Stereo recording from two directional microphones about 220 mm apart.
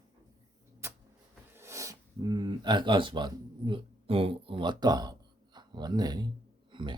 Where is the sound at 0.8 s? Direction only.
10° right (ahead or behind).